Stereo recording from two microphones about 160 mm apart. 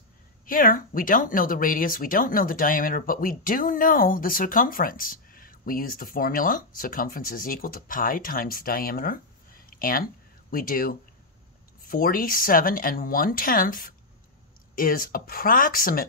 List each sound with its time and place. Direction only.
0.5 s speech: 60° left (ahead or behind)
9.7 s a sound: 65° left (ahead or behind)
10.5 s speech: 65° left (ahead or behind)